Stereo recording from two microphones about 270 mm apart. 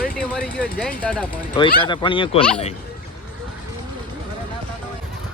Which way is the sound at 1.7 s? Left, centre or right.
Centre.